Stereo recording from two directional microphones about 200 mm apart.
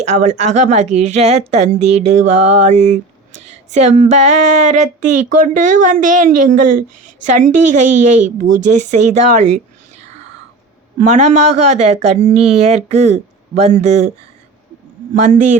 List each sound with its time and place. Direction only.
0.0 s a woman's voice: 35° right (ahead or behind)
11.0 s a woman's voice: 35° right (ahead or behind)